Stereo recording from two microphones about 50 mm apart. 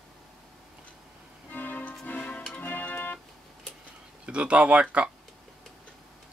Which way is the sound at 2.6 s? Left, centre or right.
Left.